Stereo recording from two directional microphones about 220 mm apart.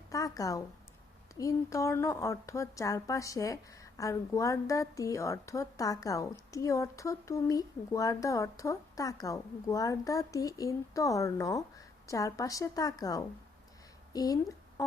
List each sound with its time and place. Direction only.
0.1 s a woman's voice: 15° left (ahead or behind)